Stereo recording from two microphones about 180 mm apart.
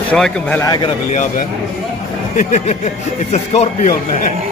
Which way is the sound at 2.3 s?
40° left (ahead or behind).